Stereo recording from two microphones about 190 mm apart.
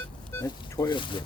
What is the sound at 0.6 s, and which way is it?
Speech, 20° left (ahead or behind).